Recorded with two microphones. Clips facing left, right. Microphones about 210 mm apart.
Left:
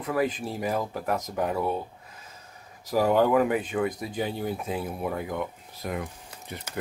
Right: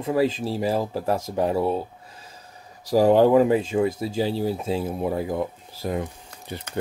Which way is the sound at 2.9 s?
35° right (ahead or behind).